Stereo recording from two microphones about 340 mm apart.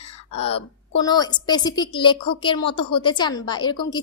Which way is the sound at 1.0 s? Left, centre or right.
Centre.